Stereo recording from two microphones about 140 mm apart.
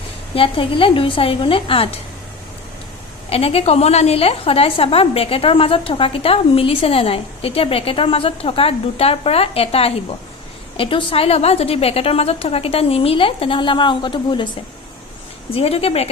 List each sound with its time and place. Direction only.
0.3 s a woman's voice: 40° left (ahead or behind)
3.2 s a woman's voice: 45° left (ahead or behind)
15.5 s a woman's voice: 45° left (ahead or behind)